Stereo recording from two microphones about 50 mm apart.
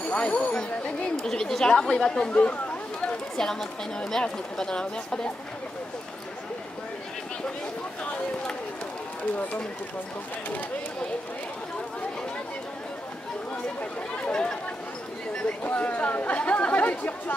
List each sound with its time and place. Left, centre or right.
0.0 s speech: left
1.2 s speech: centre
2.3 s speech: left
14.1 s speech: left
15.6 s speech: left